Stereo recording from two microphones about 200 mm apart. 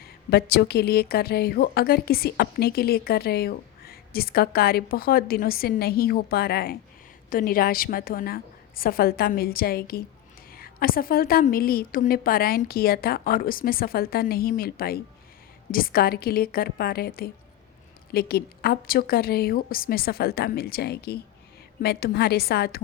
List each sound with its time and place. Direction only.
0.3 s a woman's voice: 55° left (ahead or behind)